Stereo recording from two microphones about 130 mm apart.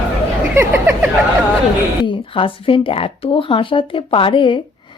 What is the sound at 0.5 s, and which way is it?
Speech, 20° right (ahead or behind).